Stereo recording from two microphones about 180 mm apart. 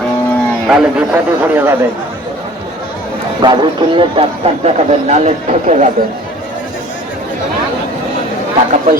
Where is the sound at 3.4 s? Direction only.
25° right (ahead or behind).